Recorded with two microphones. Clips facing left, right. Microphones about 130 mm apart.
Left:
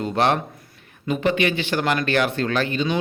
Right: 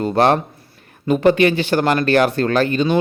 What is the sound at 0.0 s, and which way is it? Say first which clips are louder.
Speech: right 5 dB; 40° right (ahead or behind).